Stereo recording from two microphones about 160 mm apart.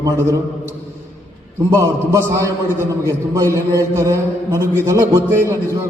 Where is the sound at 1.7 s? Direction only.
20° right (ahead or behind).